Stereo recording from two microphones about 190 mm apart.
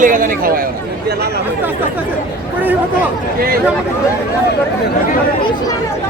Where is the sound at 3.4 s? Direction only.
50° right (ahead or behind).